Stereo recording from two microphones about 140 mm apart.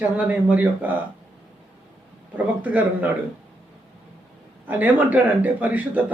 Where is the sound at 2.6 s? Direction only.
10° right (ahead or behind).